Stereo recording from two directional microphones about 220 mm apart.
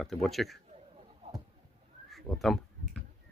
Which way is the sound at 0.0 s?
Centre (ahead or behind).